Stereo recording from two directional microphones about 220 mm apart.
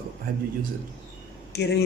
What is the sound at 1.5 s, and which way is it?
Speech, 50° left (ahead or behind).